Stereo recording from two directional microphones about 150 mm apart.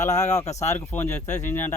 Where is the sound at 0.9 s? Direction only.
15° left (ahead or behind).